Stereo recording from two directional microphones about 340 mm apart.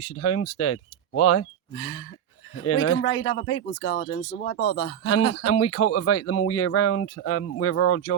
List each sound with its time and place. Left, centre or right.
0.0 s speech: left
3.9 s speech: left